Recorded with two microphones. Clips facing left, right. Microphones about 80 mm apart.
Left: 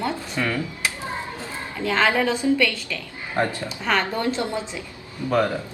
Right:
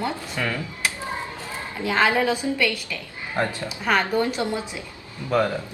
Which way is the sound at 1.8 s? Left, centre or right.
Centre.